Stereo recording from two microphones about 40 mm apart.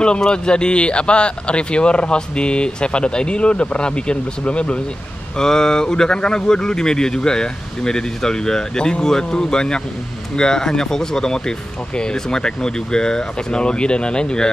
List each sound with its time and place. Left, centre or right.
0.0 s speech: left
5.4 s speech: centre